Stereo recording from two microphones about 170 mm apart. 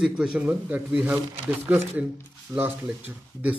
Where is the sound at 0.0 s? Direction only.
5° right (ahead or behind).